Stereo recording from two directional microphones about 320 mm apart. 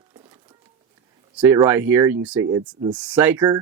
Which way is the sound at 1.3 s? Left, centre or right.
Centre.